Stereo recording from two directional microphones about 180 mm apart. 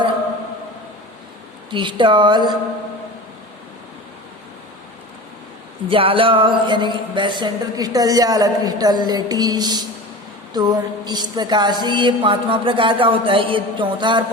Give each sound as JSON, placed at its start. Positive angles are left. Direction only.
{"t": 1.7, "sound": "music", "side_deg": -25}
{"t": 5.9, "sound": "music", "side_deg": -30}